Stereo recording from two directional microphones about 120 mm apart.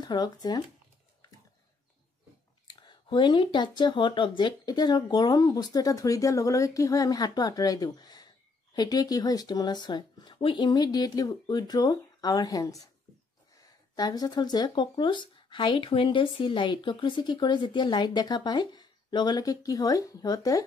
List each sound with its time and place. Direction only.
0.0 s speech: 35° left (ahead or behind)
2.7 s speech: 40° left (ahead or behind)
13.9 s speech: 35° left (ahead or behind)